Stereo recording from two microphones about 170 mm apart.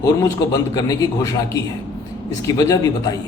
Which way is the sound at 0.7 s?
20° left (ahead or behind).